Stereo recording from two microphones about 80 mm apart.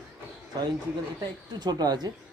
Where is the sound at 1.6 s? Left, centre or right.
Right.